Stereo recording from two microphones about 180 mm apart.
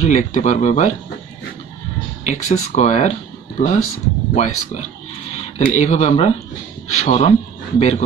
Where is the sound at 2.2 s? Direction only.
40° left (ahead or behind).